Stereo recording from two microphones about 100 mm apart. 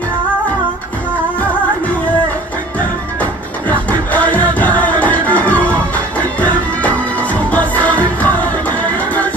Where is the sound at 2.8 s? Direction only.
15° left (ahead or behind).